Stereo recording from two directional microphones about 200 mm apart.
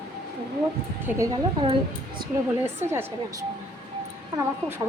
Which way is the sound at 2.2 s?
50° right (ahead or behind).